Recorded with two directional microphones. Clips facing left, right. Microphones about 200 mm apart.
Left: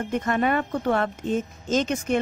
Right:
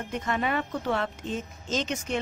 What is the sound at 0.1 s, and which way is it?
Speech, 45° left (ahead or behind).